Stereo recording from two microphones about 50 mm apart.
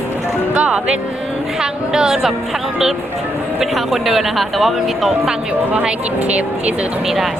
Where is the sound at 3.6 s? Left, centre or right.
Centre.